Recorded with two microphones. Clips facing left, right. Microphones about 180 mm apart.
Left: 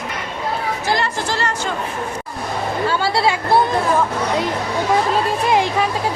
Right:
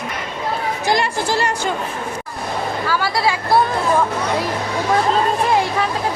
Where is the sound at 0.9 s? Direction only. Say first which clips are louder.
Right 3 dB; 10° right (ahead or behind).